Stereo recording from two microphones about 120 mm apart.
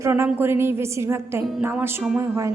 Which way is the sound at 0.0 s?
20° right (ahead or behind).